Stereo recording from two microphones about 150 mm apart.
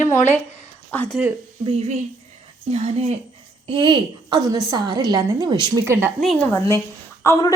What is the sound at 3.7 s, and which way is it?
A woman's voice, 35° right (ahead or behind).